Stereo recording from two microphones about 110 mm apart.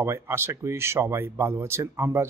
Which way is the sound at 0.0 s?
20° right (ahead or behind).